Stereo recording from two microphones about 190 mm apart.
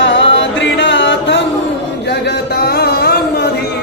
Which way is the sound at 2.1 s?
60° left (ahead or behind).